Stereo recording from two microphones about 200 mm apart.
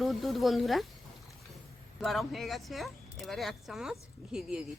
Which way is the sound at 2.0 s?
Centre (ahead or behind).